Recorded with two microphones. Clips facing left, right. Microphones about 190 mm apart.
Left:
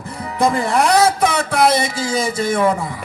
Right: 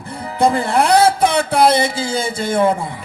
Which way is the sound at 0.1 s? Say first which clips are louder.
Right 2 dB; 30° right (ahead or behind).